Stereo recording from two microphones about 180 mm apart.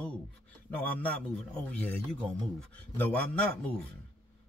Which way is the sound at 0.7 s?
10° left (ahead or behind).